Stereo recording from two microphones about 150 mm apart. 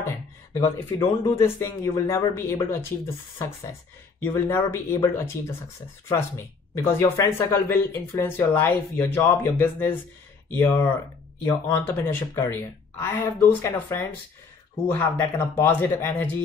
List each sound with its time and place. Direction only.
0.6 s speech: 20° left (ahead or behind)